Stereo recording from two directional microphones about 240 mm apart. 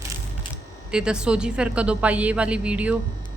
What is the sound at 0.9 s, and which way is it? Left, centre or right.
A woman's voice, centre.